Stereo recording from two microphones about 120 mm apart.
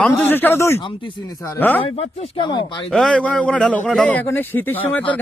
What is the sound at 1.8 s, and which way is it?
Speech, 55° left (ahead or behind).